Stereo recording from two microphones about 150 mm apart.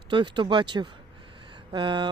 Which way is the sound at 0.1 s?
35° right (ahead or behind).